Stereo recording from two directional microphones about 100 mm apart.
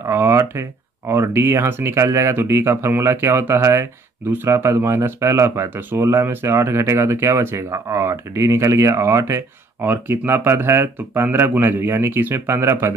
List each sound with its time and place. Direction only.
0.0 s speech: 25° right (ahead or behind)